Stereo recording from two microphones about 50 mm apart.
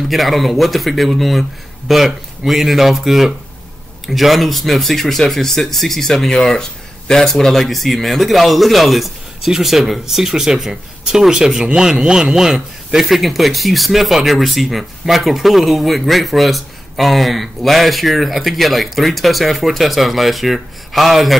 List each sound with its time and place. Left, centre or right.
0.1 s speech: centre